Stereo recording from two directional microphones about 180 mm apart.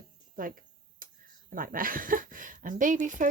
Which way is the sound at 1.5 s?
50° right (ahead or behind).